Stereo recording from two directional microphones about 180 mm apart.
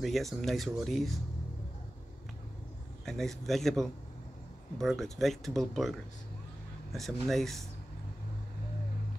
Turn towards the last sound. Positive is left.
turn(degrees=0)  # may be behind; listen again after turning